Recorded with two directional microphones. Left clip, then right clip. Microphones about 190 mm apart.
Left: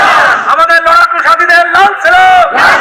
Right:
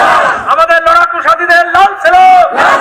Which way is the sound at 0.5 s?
25° right (ahead or behind).